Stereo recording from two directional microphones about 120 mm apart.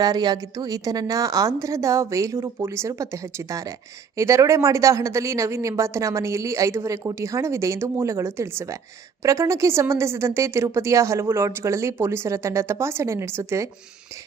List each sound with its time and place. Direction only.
0.0 s a woman's voice: 35° right (ahead or behind)